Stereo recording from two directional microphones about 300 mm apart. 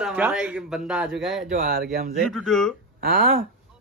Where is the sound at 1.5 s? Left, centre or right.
Right.